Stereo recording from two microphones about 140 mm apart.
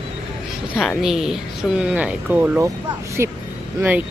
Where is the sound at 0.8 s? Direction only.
Centre (ahead or behind).